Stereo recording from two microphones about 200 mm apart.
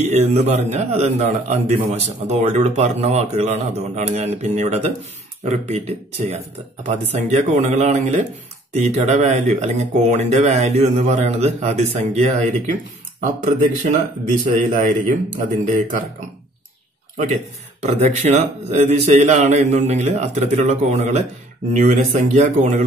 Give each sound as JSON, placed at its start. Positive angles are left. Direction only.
{"t": 0.0, "sound": "a man's voice", "side_deg": -35}
{"t": 17.8, "sound": "a man's voice", "side_deg": -35}